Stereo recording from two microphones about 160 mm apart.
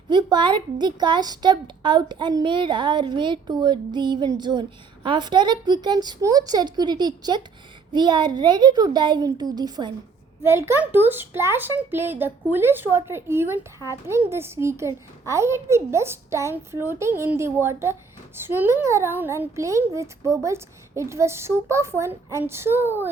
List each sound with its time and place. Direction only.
0.1 s a woman's voice: 25° right (ahead or behind)